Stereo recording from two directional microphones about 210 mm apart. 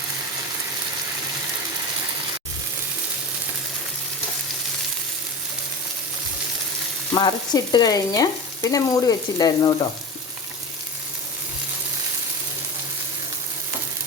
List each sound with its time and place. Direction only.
7.1 s frying: 20° left (ahead or behind)